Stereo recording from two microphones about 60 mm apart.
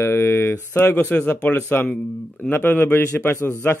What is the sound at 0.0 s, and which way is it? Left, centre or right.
Speech, left.